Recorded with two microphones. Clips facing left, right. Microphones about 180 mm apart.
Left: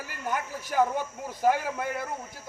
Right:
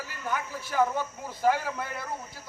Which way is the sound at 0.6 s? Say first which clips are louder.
Left 1 dB; 15° left (ahead or behind).